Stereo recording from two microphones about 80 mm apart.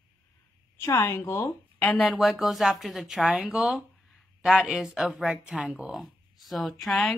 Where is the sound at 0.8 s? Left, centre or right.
Left.